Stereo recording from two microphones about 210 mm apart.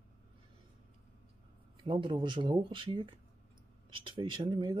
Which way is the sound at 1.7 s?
25° right (ahead or behind).